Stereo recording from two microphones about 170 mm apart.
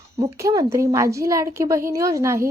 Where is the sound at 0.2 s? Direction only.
20° right (ahead or behind).